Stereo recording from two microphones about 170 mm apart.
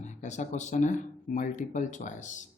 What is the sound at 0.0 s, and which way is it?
Speech, 45° left (ahead or behind).